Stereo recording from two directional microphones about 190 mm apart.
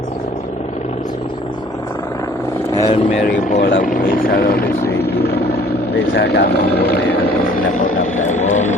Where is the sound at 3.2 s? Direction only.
45° left (ahead or behind).